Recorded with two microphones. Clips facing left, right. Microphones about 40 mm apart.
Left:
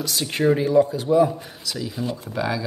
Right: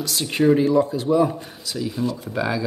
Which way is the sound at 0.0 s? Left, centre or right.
Centre.